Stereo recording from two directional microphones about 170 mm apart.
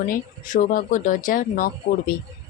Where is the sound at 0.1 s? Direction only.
50° left (ahead or behind).